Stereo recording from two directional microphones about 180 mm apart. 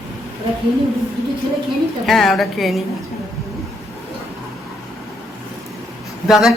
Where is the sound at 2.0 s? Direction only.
Centre (ahead or behind).